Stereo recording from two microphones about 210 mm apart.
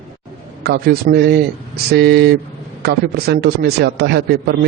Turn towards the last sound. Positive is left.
turn(degrees=-50)  # may be behind; listen again after turning